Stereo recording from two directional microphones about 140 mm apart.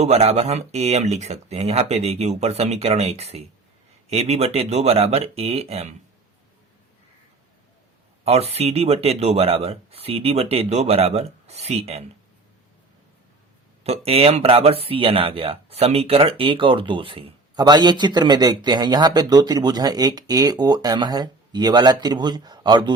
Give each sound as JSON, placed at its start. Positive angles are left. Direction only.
{"t": 0.0, "sound": "speech", "side_deg": -50}
{"t": 8.2, "sound": "speech", "side_deg": -50}
{"t": 13.8, "sound": "a man's voice", "side_deg": -45}